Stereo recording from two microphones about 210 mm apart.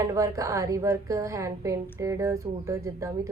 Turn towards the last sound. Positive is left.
turn(degrees=-15)  # may be behind; listen again after turning